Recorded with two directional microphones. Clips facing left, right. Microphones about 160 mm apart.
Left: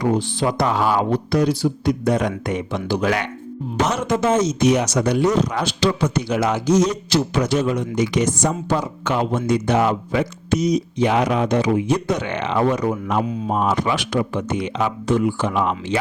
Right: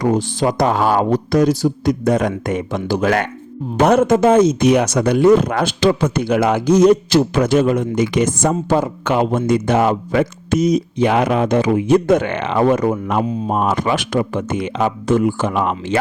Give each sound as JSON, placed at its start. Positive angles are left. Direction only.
{"t": 0.0, "sound": "speech", "side_deg": -45}